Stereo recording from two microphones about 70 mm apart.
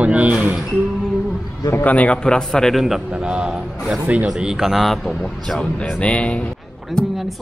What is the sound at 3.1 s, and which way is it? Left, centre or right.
A man's voice, centre.